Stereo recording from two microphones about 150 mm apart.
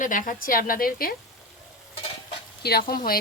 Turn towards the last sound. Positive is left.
turn(degrees=75)  # may be behind; listen again after turning